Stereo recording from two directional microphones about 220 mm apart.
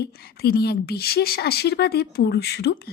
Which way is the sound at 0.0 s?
45° left (ahead or behind).